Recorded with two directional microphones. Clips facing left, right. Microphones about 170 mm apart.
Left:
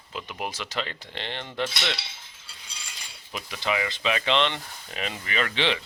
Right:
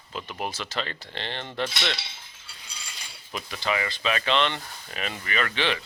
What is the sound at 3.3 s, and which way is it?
Speech, 10° left (ahead or behind).